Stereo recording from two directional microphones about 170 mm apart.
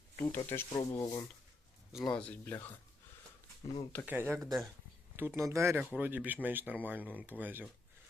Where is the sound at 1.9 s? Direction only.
5° left (ahead or behind).